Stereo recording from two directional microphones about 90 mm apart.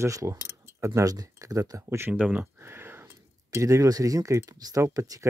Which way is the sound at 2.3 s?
25° right (ahead or behind).